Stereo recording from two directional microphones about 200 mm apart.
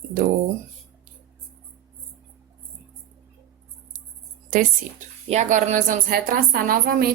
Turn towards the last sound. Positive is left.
turn(degrees=-45)  # may be behind; listen again after turning